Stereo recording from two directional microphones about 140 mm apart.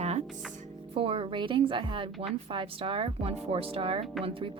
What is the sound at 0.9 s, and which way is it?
Speech, 40° right (ahead or behind).